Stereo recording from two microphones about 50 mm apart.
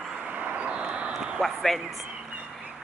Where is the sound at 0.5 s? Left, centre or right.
Right.